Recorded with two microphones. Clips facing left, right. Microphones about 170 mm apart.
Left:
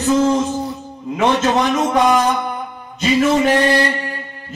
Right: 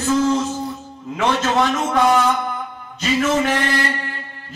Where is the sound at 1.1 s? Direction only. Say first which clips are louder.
Left 3 dB; 20° left (ahead or behind).